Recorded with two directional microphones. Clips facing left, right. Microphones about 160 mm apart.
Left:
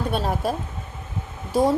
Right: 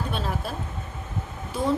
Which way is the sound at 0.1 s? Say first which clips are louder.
Left 6 dB; 40° left (ahead or behind).